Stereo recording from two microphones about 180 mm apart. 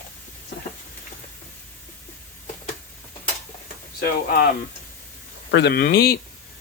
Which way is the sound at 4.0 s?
55° left (ahead or behind).